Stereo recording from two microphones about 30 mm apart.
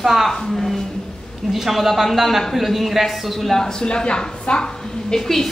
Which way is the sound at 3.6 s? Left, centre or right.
Left.